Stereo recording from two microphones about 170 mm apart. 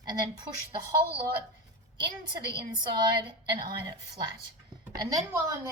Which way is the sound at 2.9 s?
25° right (ahead or behind).